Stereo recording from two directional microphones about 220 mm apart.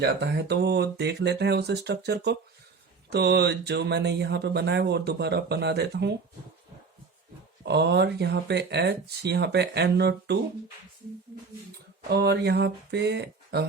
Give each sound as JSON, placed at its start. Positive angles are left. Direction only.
{"t": 0.0, "sound": "speech", "side_deg": -50}
{"t": 7.6, "sound": "speech", "side_deg": -50}
{"t": 12.0, "sound": "speech", "side_deg": -50}